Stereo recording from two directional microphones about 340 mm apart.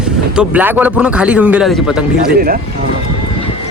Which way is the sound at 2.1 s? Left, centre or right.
Right.